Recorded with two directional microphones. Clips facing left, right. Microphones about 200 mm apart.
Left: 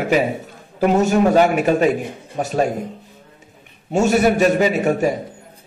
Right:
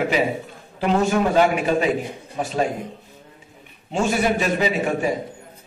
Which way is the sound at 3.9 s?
45° left (ahead or behind).